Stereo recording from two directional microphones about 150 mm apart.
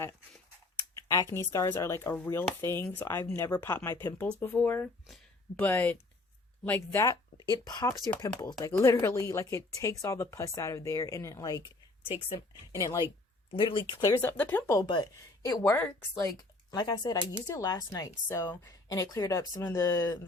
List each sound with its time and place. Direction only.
0.8 s a sound: 20° left (ahead or behind)
1.5 s speech: 20° left (ahead or behind)
5.0 s a sound: centre (ahead or behind)
5.6 s speech: 10° left (ahead or behind)
12.7 s speech: 20° left (ahead or behind)
13.5 s speech: 35° left (ahead or behind)
14.0 s speech: 15° left (ahead or behind)
14.8 s speech: 30° left (ahead or behind)
15.6 s speech: 15° left (ahead or behind)
16.7 s speech: 25° left (ahead or behind)